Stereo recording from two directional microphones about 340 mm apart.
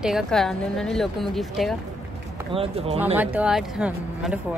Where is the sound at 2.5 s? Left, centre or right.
Centre.